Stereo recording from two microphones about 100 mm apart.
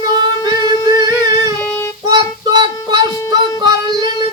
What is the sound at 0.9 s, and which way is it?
Humming, 40° right (ahead or behind).